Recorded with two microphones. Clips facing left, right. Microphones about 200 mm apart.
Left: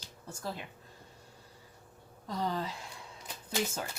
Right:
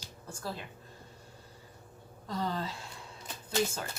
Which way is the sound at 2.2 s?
15° left (ahead or behind).